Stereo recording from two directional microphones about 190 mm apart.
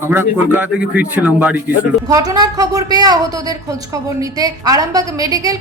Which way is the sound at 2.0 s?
20° right (ahead or behind).